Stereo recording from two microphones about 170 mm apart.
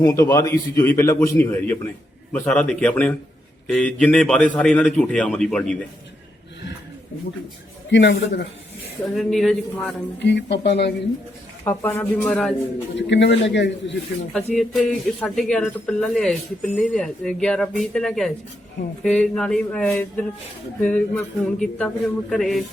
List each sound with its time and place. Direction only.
0.0 s speech: 20° left (ahead or behind); by 5.8 s 5° left (ahead or behind)
7.9 s speech: 90° left
9.1 s speech: centre (ahead or behind)
10.2 s speech: 90° left
11.6 s speech: 15° left (ahead or behind)
13.0 s speech: 90° left
14.3 s speech: 5° left (ahead or behind)